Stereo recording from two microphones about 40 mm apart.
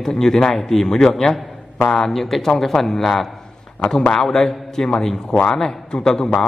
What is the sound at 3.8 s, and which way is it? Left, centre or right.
A man's voice, left.